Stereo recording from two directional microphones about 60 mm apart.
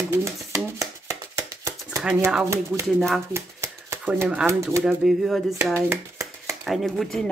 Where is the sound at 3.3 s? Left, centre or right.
Right.